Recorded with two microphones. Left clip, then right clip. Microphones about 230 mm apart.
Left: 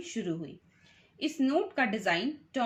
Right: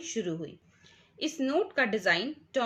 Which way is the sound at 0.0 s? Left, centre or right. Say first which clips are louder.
Right 2 dB; right.